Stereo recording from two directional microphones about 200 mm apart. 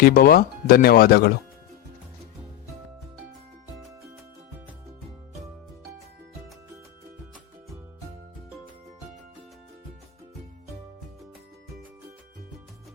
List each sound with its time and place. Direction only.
0.0 s speech: 45° left (ahead or behind)